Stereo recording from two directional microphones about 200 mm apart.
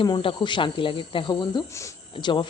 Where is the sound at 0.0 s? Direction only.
25° left (ahead or behind).